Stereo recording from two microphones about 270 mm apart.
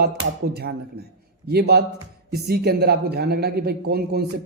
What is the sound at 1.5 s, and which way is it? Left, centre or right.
A man's voice, right.